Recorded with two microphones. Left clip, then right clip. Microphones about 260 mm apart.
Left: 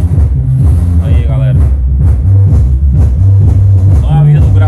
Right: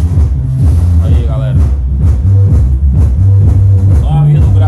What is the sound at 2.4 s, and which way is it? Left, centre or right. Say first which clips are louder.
Music: left 1 dB; centre.